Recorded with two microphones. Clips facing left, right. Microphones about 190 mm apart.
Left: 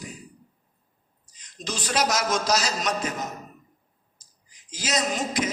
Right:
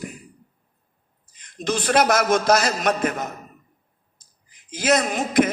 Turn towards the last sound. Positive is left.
turn(degrees=-55)  # may be behind; listen again after turning